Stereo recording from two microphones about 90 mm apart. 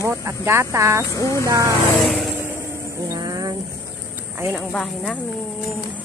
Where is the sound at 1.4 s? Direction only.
35° right (ahead or behind).